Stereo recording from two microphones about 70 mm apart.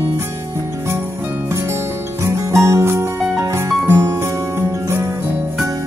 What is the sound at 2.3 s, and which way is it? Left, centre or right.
Music, right.